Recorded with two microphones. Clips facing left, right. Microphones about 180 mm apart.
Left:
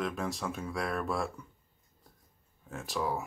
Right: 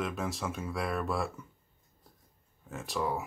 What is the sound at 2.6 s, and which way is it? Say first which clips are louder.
Speech: even; centre (ahead or behind).